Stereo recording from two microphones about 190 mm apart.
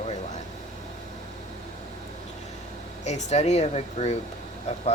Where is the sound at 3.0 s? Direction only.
35° left (ahead or behind).